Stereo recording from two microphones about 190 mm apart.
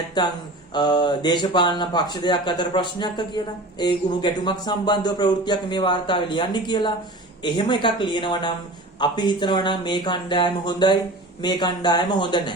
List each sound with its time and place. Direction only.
0.2 s speech: 20° left (ahead or behind)